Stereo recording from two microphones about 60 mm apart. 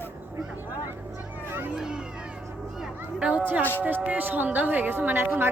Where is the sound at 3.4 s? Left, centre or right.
Right.